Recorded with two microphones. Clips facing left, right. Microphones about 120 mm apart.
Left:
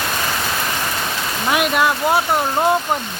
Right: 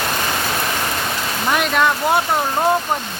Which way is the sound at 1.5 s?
5° left (ahead or behind).